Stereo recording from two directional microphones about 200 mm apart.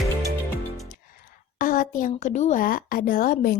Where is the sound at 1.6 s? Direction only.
45° left (ahead or behind).